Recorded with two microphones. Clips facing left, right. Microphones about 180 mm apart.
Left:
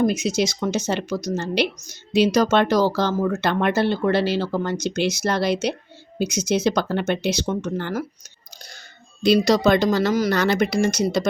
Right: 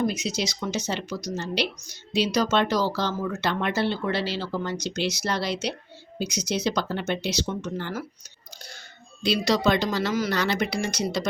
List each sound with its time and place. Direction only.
0.0 s speech: 50° left (ahead or behind)
9.2 s speech: 45° left (ahead or behind)